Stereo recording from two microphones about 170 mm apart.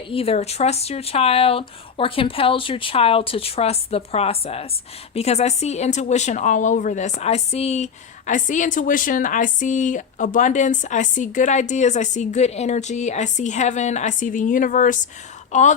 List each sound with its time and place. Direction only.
0.1 s a woman's voice: 35° left (ahead or behind)